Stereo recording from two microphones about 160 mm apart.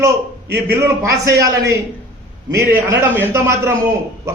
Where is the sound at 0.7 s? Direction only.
20° right (ahead or behind).